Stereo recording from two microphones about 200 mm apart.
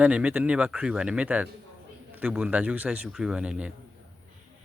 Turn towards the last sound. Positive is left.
turn(degrees=-5)  # may be behind; listen again after turning